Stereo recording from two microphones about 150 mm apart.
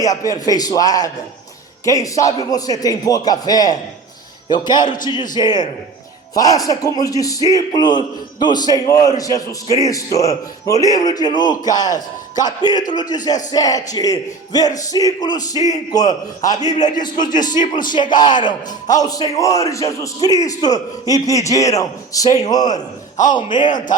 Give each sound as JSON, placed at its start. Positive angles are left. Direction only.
{"t": 0.0, "sound": "speech", "side_deg": 25}
{"t": 16.7, "sound": "speech", "side_deg": 55}
{"t": 17.0, "sound": "speech", "side_deg": 30}
{"t": 22.7, "sound": "a man's voice", "side_deg": 55}
{"t": 23.3, "sound": "a man's voice", "side_deg": 30}